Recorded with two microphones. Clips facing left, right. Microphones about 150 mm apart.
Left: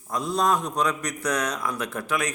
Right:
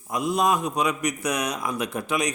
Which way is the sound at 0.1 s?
10° right (ahead or behind).